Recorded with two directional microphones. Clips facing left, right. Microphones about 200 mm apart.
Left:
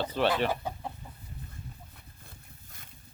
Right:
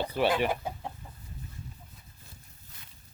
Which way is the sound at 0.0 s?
10° right (ahead or behind).